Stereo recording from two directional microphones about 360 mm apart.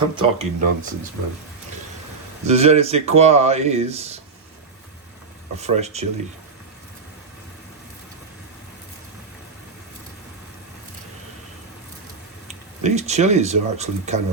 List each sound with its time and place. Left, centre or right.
0.2 s speech: centre
2.5 s speech: centre
5.5 s speech: centre
12.8 s speech: centre